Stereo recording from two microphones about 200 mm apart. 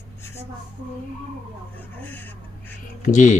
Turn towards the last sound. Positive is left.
turn(degrees=40)  # may be behind; listen again after turning